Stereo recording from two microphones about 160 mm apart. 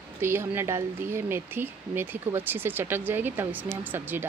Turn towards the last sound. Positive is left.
turn(degrees=-10)  # may be behind; listen again after turning